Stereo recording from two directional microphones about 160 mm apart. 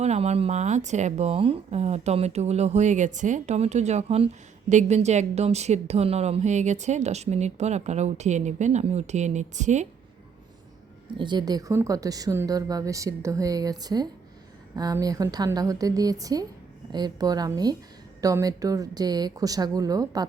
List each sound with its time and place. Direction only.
0.0 s speech: 45° right (ahead or behind)
11.2 s a woman's voice: 30° right (ahead or behind)